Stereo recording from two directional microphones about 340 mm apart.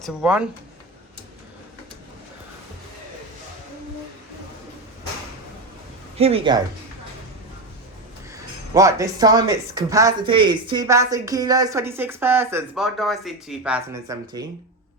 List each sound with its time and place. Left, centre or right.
0.0 s speech: centre
6.1 s speech: centre
8.7 s speech: centre